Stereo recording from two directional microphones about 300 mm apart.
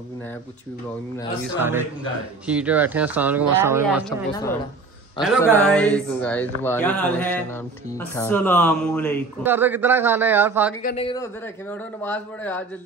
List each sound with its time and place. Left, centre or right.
1.6 s a man's voice: centre
4.3 s speech: centre
9.4 s a man's voice: centre
10.8 s a man's voice: left
12.0 s speech: centre